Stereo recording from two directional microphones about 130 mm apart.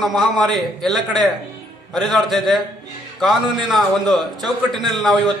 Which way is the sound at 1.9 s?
Centre (ahead or behind).